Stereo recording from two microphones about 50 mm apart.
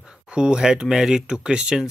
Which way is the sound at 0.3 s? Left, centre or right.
Centre.